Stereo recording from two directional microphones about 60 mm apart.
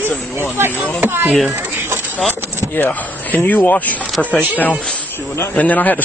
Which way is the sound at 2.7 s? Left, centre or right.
Left.